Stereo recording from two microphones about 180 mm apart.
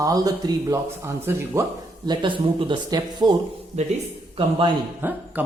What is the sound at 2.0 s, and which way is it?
Speech, 25° right (ahead or behind).